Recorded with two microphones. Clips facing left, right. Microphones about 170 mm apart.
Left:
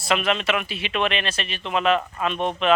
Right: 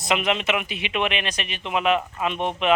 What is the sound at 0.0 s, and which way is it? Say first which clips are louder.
Speech: even; 20° right (ahead or behind).